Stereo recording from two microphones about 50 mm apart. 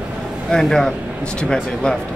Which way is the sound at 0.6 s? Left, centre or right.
Centre.